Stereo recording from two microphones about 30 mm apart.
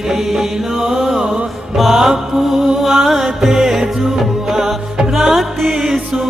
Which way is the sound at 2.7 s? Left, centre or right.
Centre.